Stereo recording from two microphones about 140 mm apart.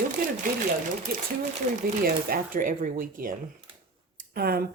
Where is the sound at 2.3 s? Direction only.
85° right.